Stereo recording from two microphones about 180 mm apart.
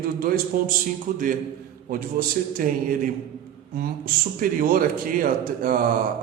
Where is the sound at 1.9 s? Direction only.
50° right (ahead or behind).